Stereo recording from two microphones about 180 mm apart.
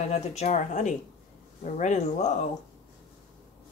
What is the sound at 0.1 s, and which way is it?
Speech, 40° left (ahead or behind).